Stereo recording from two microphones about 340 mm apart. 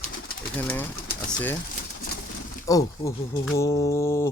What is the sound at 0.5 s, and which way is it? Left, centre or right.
Speech, centre.